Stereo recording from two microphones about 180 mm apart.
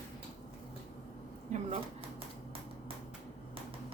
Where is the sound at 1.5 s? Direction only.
40° right (ahead or behind).